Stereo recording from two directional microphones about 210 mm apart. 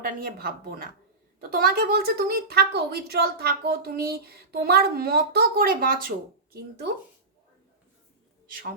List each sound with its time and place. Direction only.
0.0 s a woman's voice: 45° right (ahead or behind)
8.4 s a man's voice: 40° right (ahead or behind)